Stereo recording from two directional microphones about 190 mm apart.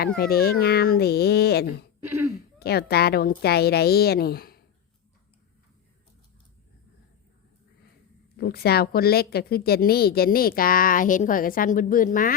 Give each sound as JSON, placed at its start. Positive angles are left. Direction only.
{"t": 0.2, "sound": "a woman's voice", "side_deg": 55}
{"t": 2.0, "sound": "speech", "side_deg": -10}
{"t": 2.6, "sound": "a woman's voice", "side_deg": 55}
{"t": 8.4, "sound": "a woman's voice", "side_deg": 55}